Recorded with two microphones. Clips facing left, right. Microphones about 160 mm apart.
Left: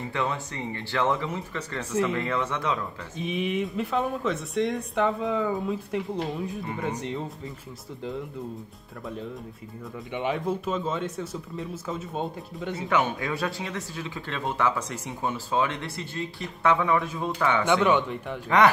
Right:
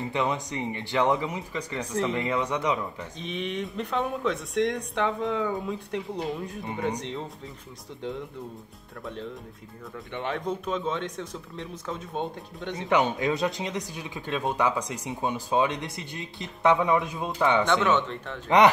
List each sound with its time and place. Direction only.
0.1 s speech: 20° right (ahead or behind)
3.2 s speech: 5° left (ahead or behind)
9.0 s speech: 5° left (ahead or behind)
12.9 s speech: 20° right (ahead or behind)
17.7 s speech: 10° left (ahead or behind)